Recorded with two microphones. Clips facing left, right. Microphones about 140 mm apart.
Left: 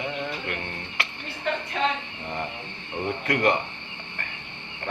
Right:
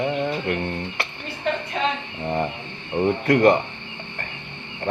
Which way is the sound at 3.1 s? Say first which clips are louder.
Right 7 dB; 40° right (ahead or behind).